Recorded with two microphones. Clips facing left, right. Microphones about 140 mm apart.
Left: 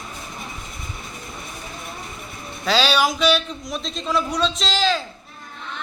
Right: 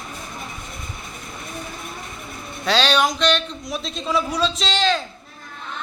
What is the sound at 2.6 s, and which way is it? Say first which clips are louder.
A man's voice: even; centre (ahead or behind).